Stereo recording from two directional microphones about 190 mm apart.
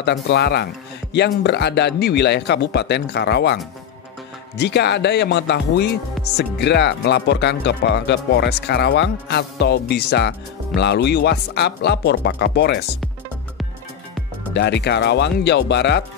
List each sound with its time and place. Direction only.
0.0 s speech: 60° left (ahead or behind)
4.6 s speech: 60° left (ahead or behind)
14.5 s speech: 60° left (ahead or behind)